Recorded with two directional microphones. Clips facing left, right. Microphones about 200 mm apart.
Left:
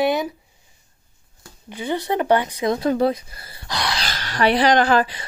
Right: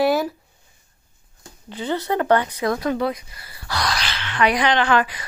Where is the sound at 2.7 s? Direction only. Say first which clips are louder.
Left 3 dB; 30° left (ahead or behind).